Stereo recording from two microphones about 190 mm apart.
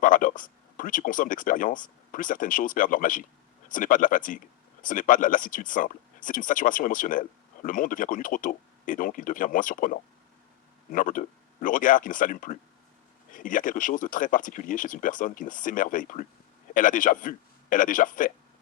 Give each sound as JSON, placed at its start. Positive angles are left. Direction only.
{"t": 0.0, "sound": "speech", "side_deg": 45}